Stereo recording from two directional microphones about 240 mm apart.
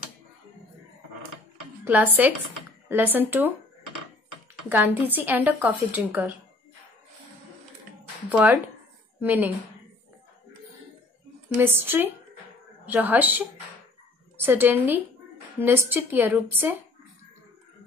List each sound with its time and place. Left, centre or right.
1.9 s a woman's voice: centre
4.6 s a woman's voice: centre
8.3 s a woman's voice: centre
11.5 s a woman's voice: centre